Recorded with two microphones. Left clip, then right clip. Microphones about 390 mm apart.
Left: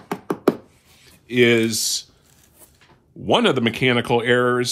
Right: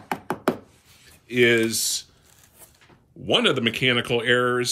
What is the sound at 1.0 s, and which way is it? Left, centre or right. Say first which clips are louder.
Speech: left 2 dB; centre.